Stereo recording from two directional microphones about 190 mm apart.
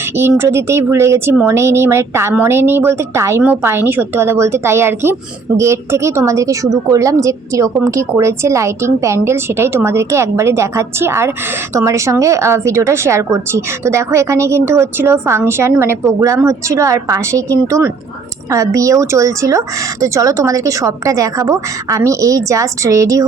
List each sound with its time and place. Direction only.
0.2 s a woman's voice: 15° right (ahead or behind)